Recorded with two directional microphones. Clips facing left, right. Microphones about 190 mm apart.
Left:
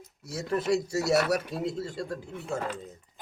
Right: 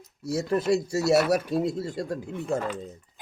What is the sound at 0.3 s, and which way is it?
Speech, 30° right (ahead or behind).